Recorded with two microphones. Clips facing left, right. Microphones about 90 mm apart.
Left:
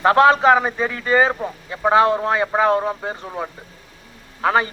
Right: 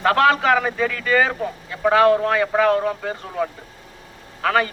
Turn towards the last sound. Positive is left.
turn(degrees=25)  # may be behind; listen again after turning